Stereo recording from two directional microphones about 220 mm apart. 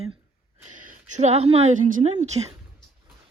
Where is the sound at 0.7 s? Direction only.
35° right (ahead or behind).